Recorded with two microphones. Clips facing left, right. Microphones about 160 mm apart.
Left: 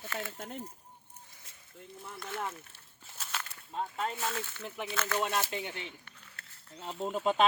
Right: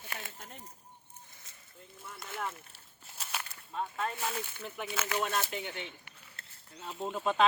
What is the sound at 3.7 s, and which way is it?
Speech, 20° left (ahead or behind).